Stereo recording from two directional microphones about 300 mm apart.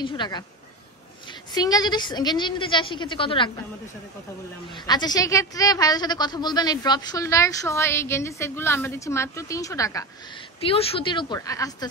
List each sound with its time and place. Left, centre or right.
0.0 s a woman's voice: centre
1.5 s a woman's voice: centre
4.7 s a woman's voice: centre